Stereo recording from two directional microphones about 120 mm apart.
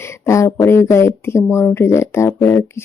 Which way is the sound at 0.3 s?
25° left (ahead or behind).